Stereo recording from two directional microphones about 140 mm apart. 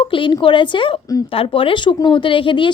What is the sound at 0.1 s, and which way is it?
A woman's voice, 40° left (ahead or behind).